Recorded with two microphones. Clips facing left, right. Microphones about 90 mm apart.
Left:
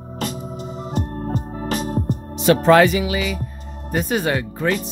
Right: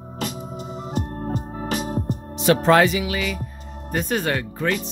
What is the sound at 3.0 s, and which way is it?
Music, 10° left (ahead or behind).